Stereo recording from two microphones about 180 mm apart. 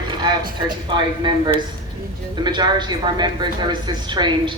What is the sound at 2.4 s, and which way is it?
Speech, 25° right (ahead or behind).